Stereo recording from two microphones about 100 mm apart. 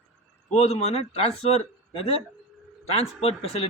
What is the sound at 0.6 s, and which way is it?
Speech, 90° left.